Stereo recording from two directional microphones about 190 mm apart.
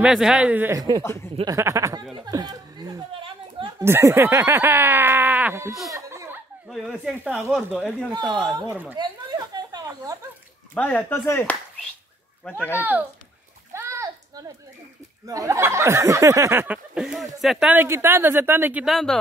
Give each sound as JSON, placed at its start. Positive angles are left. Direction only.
{"t": 0.0, "sound": "speech", "side_deg": -5}
{"t": 1.0, "sound": "speech", "side_deg": 15}
{"t": 1.3, "sound": "speech", "side_deg": -20}
{"t": 2.2, "sound": "a sound", "side_deg": -20}
{"t": 3.8, "sound": "snicker", "side_deg": -10}
{"t": 5.9, "sound": "a sound", "side_deg": -15}
{"t": 6.7, "sound": "speech", "side_deg": 0}
{"t": 8.6, "sound": "speech", "side_deg": -10}
{"t": 8.9, "sound": "a sound", "side_deg": -20}
{"t": 10.7, "sound": "speech", "side_deg": 10}
{"t": 13.7, "sound": "a sound", "side_deg": -15}
{"t": 15.2, "sound": "speech", "side_deg": -15}